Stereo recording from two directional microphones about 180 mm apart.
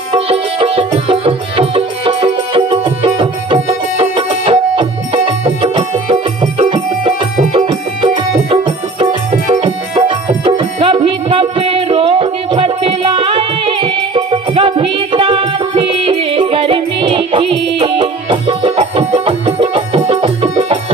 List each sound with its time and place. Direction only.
0.1 s music: 30° right (ahead or behind)